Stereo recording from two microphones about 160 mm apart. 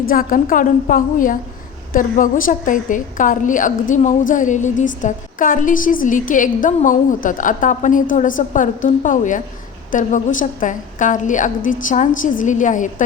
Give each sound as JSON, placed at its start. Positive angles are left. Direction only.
{"t": 0.1, "sound": "a woman's voice", "side_deg": 60}